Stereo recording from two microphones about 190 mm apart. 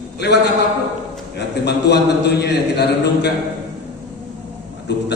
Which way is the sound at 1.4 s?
60° left (ahead or behind).